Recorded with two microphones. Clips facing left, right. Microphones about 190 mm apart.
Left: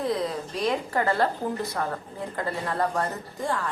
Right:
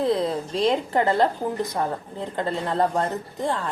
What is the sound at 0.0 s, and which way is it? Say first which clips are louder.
A woman's voice: right 5 dB; 30° right (ahead or behind).